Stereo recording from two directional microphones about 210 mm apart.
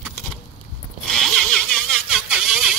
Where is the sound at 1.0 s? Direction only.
Centre (ahead or behind).